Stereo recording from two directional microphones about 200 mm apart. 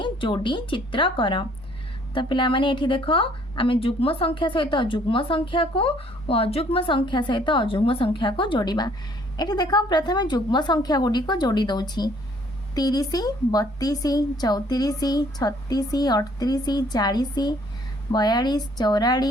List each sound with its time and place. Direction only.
0.0 s a woman's voice: 25° left (ahead or behind)